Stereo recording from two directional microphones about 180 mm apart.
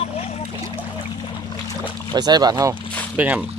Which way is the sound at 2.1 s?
20° right (ahead or behind).